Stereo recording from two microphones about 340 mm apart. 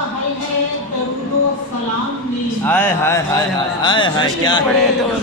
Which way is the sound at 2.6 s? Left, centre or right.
Centre.